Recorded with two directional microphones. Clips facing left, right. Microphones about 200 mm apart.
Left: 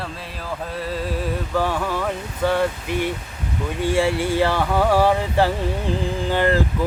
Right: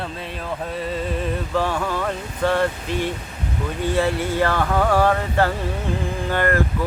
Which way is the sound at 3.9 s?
10° left (ahead or behind).